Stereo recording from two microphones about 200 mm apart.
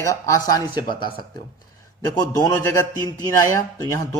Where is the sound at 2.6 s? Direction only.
10° left (ahead or behind).